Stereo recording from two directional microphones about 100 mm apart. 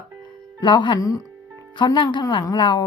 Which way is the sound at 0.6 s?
50° left (ahead or behind).